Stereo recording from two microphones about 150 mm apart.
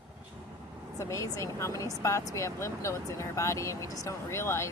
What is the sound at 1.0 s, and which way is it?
Speech, 20° left (ahead or behind).